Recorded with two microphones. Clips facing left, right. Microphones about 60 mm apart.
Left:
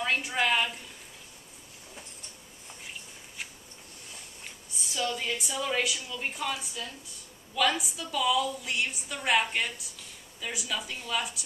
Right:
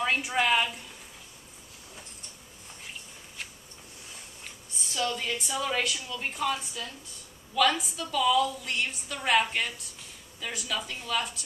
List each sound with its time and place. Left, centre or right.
0.0 s a woman's voice: centre
4.7 s a woman's voice: centre